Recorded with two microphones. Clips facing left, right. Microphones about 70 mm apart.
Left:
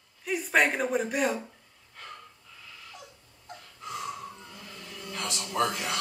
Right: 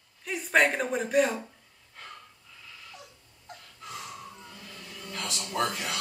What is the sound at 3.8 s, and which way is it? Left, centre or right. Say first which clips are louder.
Wheeze: left 5 dB; left.